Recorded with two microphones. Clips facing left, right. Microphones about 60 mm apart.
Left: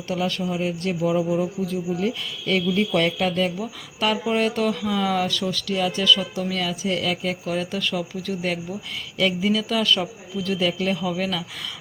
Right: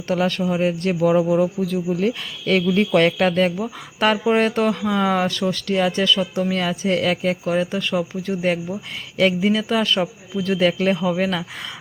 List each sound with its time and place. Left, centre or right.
0.1 s speech: right
1.1 s speech: right